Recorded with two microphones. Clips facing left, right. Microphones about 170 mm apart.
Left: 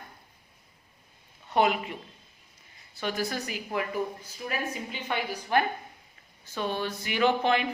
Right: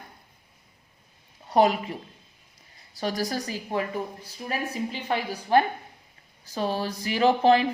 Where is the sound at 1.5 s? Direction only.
35° right (ahead or behind).